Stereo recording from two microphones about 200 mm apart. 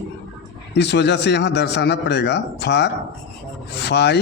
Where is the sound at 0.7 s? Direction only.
60° left (ahead or behind).